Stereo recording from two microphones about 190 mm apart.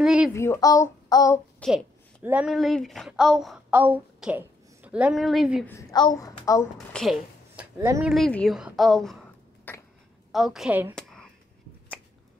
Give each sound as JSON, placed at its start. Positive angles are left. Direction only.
{"t": 0.0, "sound": "a woman's voice", "side_deg": -5}
{"t": 0.3, "sound": "a woman's voice", "side_deg": 15}
{"t": 1.6, "sound": "a sound", "side_deg": 5}
{"t": 2.2, "sound": "speech", "side_deg": -5}
{"t": 5.7, "sound": "a woman's voice", "side_deg": 15}
{"t": 6.9, "sound": "speech", "side_deg": 0}
{"t": 8.1, "sound": "a woman's voice", "side_deg": 5}
{"t": 9.7, "sound": "a sound", "side_deg": 10}
{"t": 10.3, "sound": "a woman's voice", "side_deg": 0}
{"t": 11.0, "sound": "a sound", "side_deg": 5}